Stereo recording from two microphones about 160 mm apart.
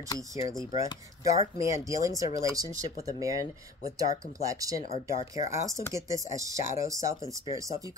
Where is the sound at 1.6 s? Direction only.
20° right (ahead or behind).